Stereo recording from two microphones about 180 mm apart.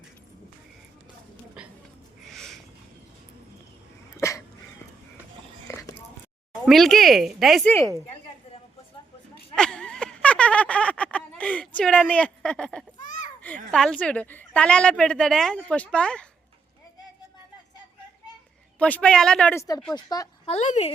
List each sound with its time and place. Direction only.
1.6 s a sound: 5° right (ahead or behind)
4.2 s sneeze: 15° left (ahead or behind)
5.6 s biting: 15° left (ahead or behind)
6.7 s a woman's voice: centre (ahead or behind)
7.7 s a woman's voice: 15° left (ahead or behind)
9.6 s a sound: 5° left (ahead or behind)
13.0 s a sound: 45° left (ahead or behind)
13.4 s a woman's voice: 5° left (ahead or behind)
18.8 s a woman's voice: 10° left (ahead or behind)
19.9 s speech: 20° left (ahead or behind)
20.5 s a woman's voice: 40° left (ahead or behind)